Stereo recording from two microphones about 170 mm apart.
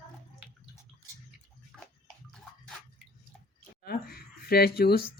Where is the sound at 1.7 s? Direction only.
5° right (ahead or behind).